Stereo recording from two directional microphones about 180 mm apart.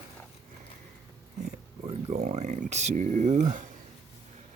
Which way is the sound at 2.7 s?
40° right (ahead or behind).